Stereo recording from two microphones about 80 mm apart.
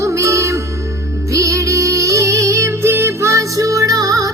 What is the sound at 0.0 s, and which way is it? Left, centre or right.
Music, right.